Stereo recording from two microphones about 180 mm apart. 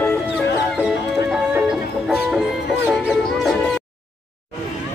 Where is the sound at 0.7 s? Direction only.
5° right (ahead or behind).